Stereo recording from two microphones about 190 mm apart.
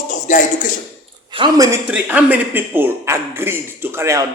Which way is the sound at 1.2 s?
25° right (ahead or behind).